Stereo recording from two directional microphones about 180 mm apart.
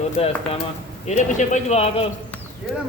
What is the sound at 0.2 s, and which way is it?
Speech, 35° left (ahead or behind).